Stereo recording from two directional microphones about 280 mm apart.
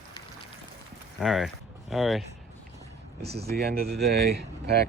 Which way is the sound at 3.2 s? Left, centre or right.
Right.